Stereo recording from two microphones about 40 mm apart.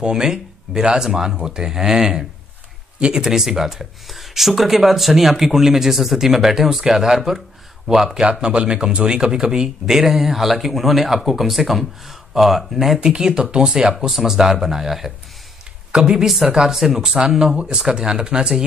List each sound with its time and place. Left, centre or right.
0.0 s speech: centre
13.0 s speech: centre
14.1 s speech: centre
15.9 s speech: centre